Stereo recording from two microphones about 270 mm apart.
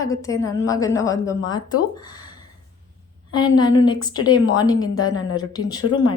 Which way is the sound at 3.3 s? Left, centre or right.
Centre.